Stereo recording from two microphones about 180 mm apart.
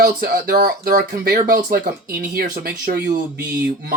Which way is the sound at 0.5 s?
50° right (ahead or behind).